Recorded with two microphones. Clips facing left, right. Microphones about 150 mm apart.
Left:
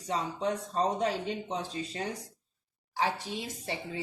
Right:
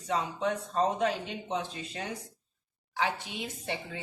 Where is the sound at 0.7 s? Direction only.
30° left (ahead or behind).